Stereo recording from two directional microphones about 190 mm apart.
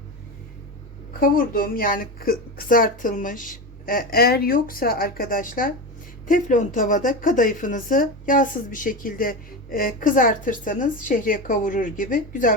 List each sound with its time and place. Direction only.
1.2 s a woman's voice: 45° left (ahead or behind)